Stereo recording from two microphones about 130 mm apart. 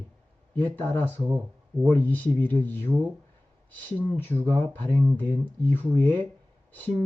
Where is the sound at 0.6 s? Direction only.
15° left (ahead or behind).